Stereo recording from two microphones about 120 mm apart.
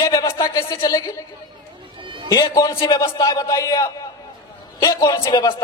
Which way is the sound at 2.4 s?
30° left (ahead or behind).